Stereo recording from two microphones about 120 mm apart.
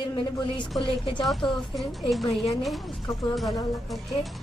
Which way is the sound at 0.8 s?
40° left (ahead or behind).